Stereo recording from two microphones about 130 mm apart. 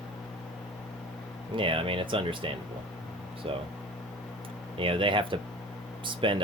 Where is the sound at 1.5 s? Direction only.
40° right (ahead or behind).